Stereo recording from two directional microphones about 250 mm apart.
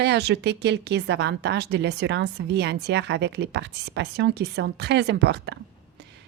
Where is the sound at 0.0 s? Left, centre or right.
Right.